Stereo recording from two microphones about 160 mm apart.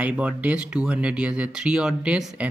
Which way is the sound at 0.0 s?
10° right (ahead or behind).